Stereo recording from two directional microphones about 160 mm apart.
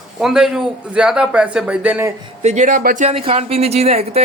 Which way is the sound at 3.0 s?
35° right (ahead or behind).